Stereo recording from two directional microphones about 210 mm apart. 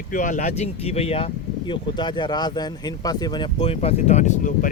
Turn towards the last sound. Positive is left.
turn(degrees=40)  # may be behind; listen again after turning